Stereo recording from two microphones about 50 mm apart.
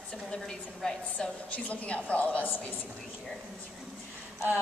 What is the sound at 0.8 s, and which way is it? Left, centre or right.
A woman's voice, centre.